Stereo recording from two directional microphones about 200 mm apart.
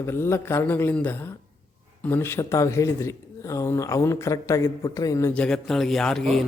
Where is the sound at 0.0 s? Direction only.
15° left (ahead or behind).